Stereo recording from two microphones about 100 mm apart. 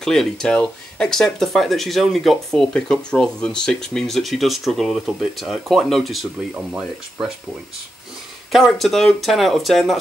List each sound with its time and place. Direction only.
0.0 s speech: 5° left (ahead or behind)
8.5 s speech: centre (ahead or behind)